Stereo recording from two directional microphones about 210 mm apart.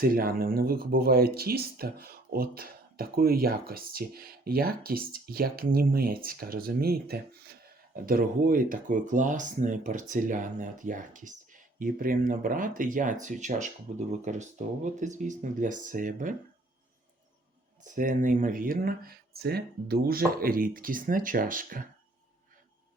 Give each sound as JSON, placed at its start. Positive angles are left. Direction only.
{"t": 0.0, "sound": "speech", "side_deg": -45}
{"t": 17.8, "sound": "speech", "side_deg": -40}